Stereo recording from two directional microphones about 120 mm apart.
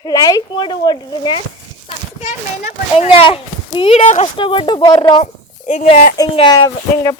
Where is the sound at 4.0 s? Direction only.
90° left.